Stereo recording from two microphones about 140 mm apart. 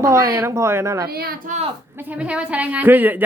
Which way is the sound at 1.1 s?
90° right.